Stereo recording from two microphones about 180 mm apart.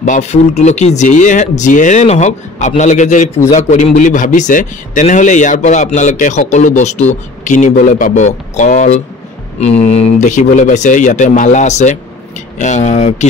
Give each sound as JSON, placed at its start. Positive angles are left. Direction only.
{"t": 0.0, "sound": "a man's voice", "side_deg": 40}